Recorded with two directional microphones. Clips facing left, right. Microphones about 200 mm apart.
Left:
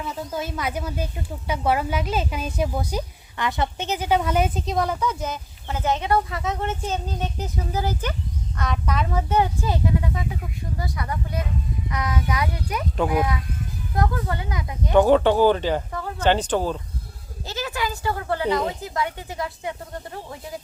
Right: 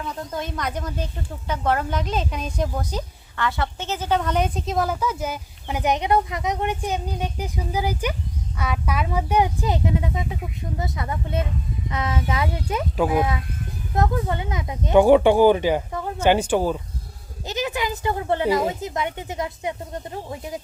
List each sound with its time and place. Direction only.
0.0 s speech: 5° left (ahead or behind); by 18.4 s 20° right (ahead or behind)
18.4 s speech: 5° right (ahead or behind)
18.7 s speech: 20° right (ahead or behind)